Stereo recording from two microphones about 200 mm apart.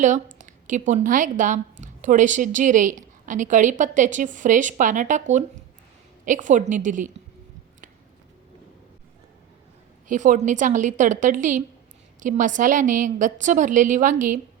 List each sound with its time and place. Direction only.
0.0 s a woman's voice: 40° right (ahead or behind)
10.1 s a woman's voice: 40° right (ahead or behind)